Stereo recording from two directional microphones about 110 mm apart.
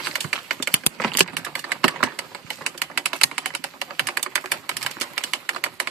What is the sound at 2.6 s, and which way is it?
Typewriter, centre (ahead or behind).